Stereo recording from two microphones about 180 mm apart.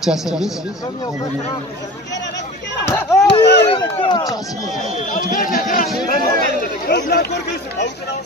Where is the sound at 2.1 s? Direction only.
75° left (ahead or behind).